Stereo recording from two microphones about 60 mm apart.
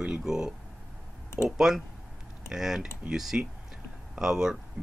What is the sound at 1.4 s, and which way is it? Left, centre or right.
Speech, right.